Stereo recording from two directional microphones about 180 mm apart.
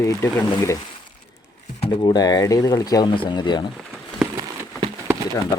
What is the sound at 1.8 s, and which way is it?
Speech, 25° left (ahead or behind).